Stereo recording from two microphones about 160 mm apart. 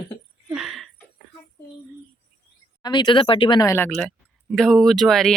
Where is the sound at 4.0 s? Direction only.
Centre (ahead or behind).